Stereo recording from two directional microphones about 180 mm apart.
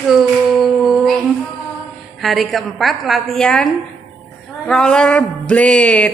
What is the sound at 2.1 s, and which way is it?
Speech, centre (ahead or behind).